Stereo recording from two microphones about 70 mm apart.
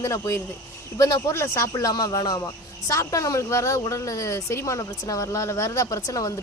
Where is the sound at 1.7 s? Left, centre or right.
Left.